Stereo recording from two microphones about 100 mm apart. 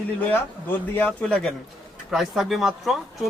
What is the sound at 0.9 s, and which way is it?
Speech, 15° left (ahead or behind).